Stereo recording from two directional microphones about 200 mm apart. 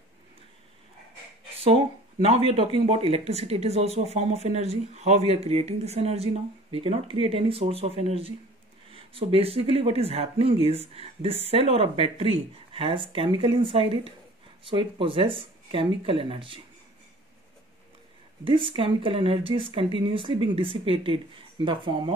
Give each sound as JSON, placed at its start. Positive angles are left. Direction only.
{"t": 2.2, "sound": "speech", "side_deg": -30}
{"t": 18.4, "sound": "speech", "side_deg": -25}